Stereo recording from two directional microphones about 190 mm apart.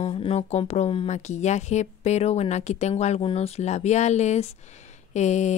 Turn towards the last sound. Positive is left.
turn(degrees=40)  # may be behind; listen again after turning